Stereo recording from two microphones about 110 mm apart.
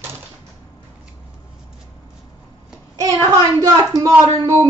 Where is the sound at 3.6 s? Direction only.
30° right (ahead or behind).